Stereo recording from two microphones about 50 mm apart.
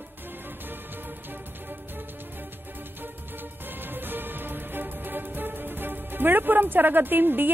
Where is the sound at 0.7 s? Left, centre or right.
Right.